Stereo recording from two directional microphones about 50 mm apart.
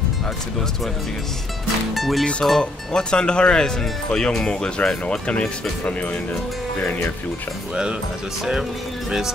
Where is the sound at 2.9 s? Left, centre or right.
Centre.